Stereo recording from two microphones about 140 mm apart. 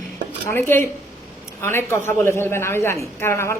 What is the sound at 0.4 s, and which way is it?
A man's voice, 15° left (ahead or behind).